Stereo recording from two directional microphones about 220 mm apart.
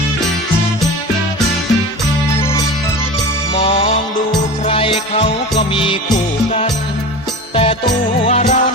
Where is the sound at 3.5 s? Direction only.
25° left (ahead or behind).